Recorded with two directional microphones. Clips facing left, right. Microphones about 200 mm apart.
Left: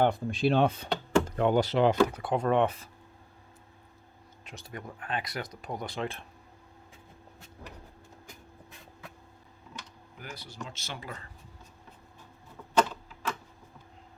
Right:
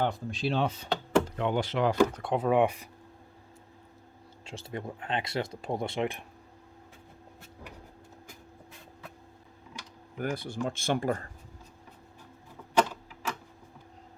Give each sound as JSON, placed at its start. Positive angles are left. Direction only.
{"t": 0.0, "sound": "speech", "side_deg": 55}
{"t": 1.4, "sound": "speech", "side_deg": 40}
{"t": 2.1, "sound": "speech", "side_deg": 0}
{"t": 4.4, "sound": "speech", "side_deg": -25}
{"t": 10.2, "sound": "speech", "side_deg": -55}
{"t": 12.7, "sound": "typewriter", "side_deg": -10}